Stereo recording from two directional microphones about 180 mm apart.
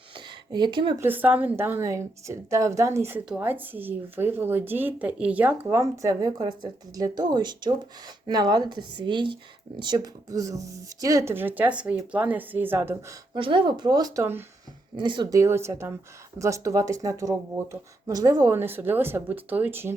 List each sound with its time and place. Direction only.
0.1 s a sound: 25° right (ahead or behind)
0.9 s speech: 10° right (ahead or behind)
13.3 s speech: 25° right (ahead or behind)
14.9 s speech: 25° right (ahead or behind); by 19.9 s 10° right (ahead or behind)